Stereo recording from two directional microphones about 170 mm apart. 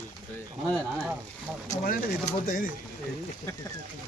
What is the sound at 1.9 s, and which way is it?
Speech, 55° left (ahead or behind).